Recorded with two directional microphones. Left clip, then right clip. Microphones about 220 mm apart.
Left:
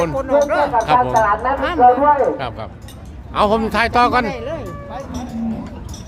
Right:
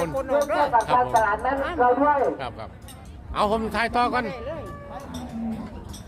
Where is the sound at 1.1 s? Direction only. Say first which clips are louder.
Left 6 dB; 20° right (ahead or behind).